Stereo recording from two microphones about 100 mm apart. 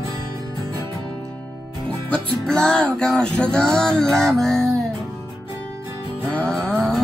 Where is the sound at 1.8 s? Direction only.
10° left (ahead or behind).